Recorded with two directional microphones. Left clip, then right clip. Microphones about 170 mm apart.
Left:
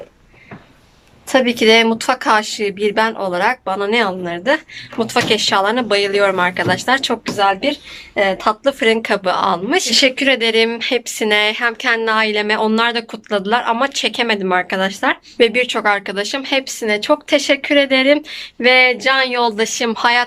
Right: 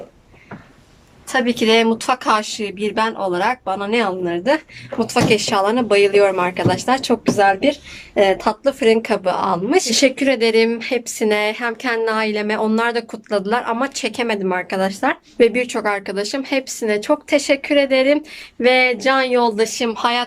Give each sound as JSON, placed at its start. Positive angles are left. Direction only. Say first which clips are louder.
{"t": 1.3, "sound": "speech", "louder": "left 4 dB", "side_deg": 20}
{"t": 1.5, "sound": "speech", "louder": "left 2 dB", "side_deg": 0}